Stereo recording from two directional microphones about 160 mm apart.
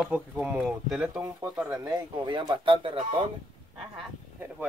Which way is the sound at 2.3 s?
30° right (ahead or behind).